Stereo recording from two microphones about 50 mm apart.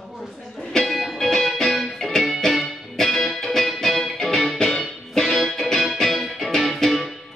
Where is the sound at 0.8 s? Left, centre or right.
Centre.